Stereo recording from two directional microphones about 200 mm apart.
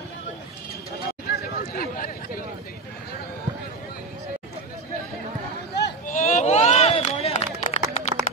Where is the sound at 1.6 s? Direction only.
45° left (ahead or behind).